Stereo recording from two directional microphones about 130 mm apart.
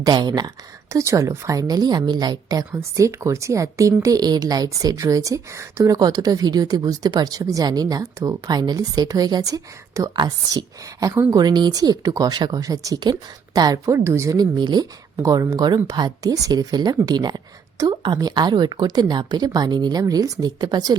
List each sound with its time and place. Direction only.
0.0 s speech: 30° right (ahead or behind)